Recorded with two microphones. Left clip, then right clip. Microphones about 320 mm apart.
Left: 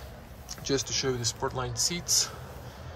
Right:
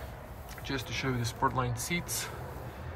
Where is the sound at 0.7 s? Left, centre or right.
Centre.